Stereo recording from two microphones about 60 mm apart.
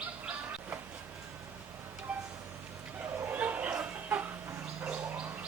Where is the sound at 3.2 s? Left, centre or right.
Right.